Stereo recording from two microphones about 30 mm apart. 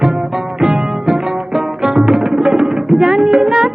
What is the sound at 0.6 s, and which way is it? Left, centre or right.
Music, right.